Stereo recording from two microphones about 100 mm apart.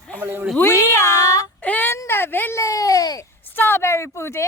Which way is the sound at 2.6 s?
35° left (ahead or behind).